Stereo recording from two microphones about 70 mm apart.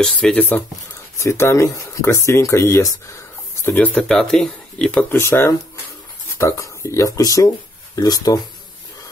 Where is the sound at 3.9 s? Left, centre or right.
Centre.